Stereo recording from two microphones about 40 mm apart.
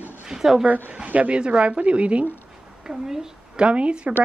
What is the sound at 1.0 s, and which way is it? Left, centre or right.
Speech, right.